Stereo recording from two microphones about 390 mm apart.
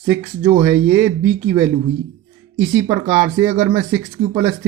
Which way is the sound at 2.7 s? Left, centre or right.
Centre.